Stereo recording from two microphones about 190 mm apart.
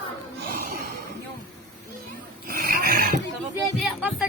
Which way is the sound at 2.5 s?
50° right (ahead or behind).